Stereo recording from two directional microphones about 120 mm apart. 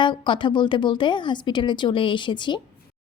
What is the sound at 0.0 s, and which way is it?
A woman's voice, 40° left (ahead or behind).